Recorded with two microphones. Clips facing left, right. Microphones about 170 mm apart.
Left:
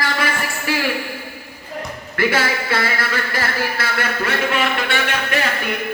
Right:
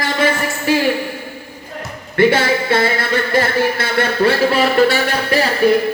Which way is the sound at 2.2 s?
25° right (ahead or behind).